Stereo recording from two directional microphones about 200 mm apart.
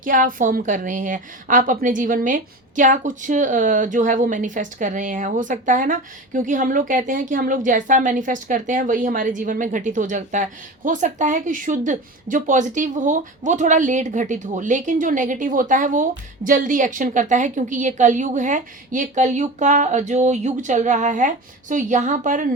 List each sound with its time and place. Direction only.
0.0 s a woman's voice: 40° right (ahead or behind)